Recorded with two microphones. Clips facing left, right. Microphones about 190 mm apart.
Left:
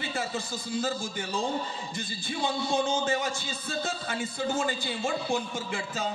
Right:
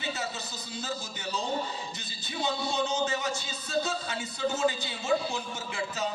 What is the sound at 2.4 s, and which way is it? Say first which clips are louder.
A man's voice: left 2 dB; 50° left (ahead or behind).